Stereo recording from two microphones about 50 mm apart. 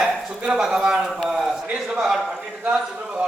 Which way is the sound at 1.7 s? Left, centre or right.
Right.